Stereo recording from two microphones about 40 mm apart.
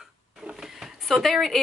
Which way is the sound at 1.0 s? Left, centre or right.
Centre.